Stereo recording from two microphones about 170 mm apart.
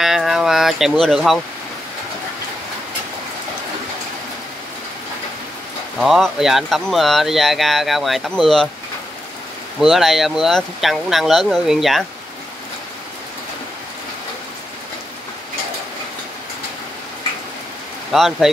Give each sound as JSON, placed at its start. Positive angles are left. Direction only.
{"t": 0.0, "sound": "a sound", "side_deg": 0}
{"t": 5.9, "sound": "speech", "side_deg": 0}
{"t": 9.8, "sound": "speech", "side_deg": 0}
{"t": 18.1, "sound": "speech", "side_deg": 0}